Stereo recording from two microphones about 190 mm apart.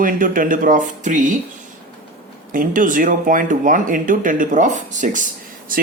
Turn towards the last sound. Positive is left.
turn(degrees=-45)  # may be behind; listen again after turning